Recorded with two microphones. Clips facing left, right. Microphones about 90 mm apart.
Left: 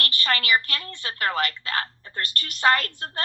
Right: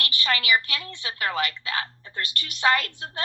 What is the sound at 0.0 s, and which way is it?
A woman's voice, 45° left (ahead or behind).